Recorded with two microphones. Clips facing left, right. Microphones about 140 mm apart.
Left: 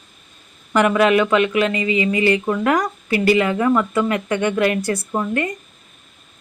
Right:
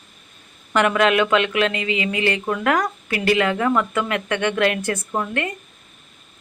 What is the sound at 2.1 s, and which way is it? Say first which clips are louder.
Speech: left 5 dB; 60° right (ahead or behind).